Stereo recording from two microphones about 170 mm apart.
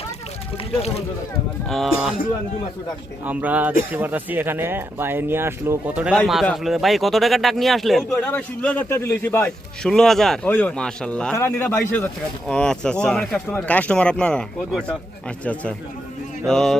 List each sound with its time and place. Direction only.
0.7 s speech: 35° left (ahead or behind)
1.7 s speech: centre (ahead or behind)
3.2 s speech: 10° right (ahead or behind)
8.1 s a man's voice: 10° left (ahead or behind)
16.5 s speech: 5° left (ahead or behind)